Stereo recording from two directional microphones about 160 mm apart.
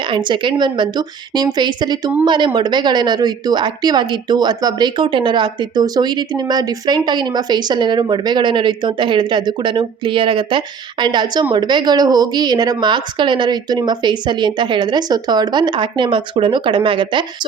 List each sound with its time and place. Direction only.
0.0 s a woman's voice: 30° right (ahead or behind)